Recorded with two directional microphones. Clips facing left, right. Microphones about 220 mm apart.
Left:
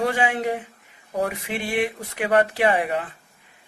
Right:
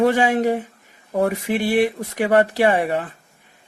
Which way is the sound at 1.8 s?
35° right (ahead or behind).